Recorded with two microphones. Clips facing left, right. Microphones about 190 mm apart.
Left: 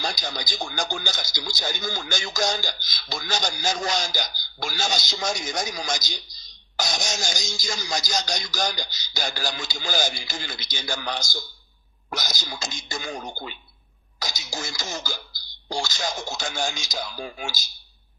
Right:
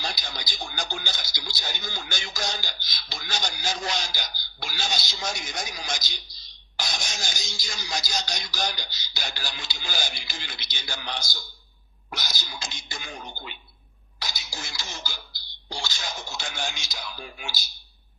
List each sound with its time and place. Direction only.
0.0 s a man's voice: 45° left (ahead or behind)
12.4 s a man's voice: 45° left (ahead or behind)